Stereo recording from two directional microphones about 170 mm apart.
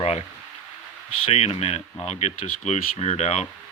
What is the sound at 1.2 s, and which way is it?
Speech, 40° left (ahead or behind).